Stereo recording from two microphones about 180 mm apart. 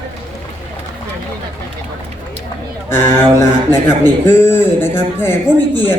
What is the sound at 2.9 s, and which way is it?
A man's voice, 15° left (ahead or behind).